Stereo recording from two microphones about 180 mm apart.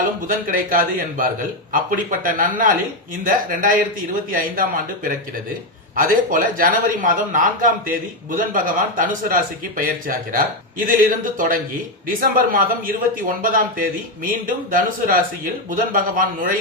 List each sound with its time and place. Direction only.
0.3 s a man's voice: 50° right (ahead or behind)
6.0 s a man's voice: 50° right (ahead or behind)